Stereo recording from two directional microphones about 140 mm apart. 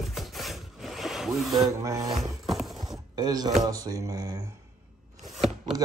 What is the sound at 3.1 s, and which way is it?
Speech, 30° right (ahead or behind).